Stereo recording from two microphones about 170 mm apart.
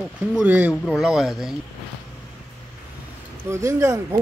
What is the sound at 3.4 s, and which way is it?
Speech, 15° right (ahead or behind).